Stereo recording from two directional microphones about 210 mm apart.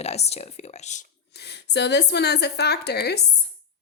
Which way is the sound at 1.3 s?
50° left (ahead or behind).